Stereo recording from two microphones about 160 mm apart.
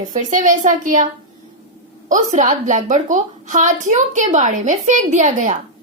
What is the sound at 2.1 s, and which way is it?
A woman's voice, 50° right (ahead or behind).